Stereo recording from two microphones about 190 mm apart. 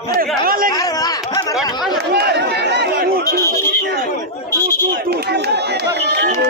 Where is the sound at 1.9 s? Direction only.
60° right (ahead or behind).